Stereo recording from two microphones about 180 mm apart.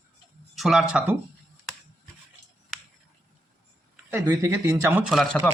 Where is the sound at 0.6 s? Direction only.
Centre (ahead or behind).